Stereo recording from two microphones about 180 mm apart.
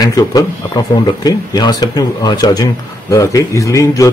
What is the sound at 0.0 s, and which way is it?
Speech, 20° left (ahead or behind).